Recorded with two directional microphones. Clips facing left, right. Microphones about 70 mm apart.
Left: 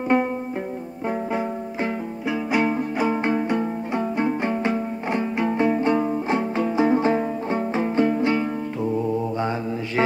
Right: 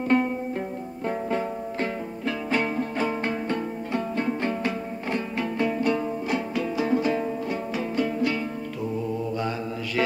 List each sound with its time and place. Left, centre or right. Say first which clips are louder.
0.1 s music: left 2 dB; centre
9.4 s mantra: left 4 dB; left